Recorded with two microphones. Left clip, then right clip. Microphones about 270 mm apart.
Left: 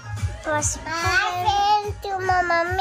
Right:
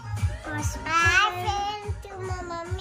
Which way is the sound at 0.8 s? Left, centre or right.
Centre.